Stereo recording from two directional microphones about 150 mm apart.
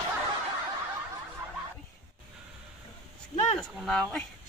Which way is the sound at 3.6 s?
5° left (ahead or behind).